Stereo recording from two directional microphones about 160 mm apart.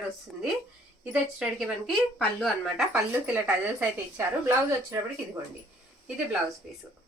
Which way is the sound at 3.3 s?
10° right (ahead or behind).